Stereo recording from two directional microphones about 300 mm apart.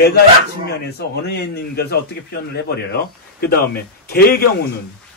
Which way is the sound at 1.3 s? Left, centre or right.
Left.